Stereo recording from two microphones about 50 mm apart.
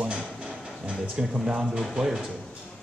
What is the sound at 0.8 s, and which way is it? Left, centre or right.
Speech, centre.